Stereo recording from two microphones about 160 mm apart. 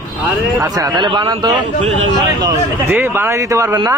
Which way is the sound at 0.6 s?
25° right (ahead or behind).